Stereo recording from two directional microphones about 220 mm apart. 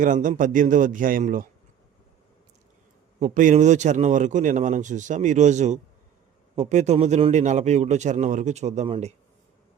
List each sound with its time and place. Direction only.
0.0 s a man's voice: 35° right (ahead or behind)
3.2 s a man's voice: 35° right (ahead or behind)